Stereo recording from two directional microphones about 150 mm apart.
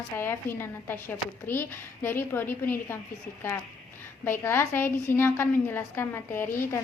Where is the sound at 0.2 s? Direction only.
15° left (ahead or behind).